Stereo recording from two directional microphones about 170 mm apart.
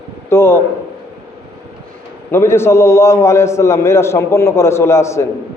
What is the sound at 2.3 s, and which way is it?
A man's voice, 15° left (ahead or behind).